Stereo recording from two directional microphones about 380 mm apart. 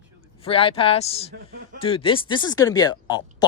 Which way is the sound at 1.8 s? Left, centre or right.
Centre.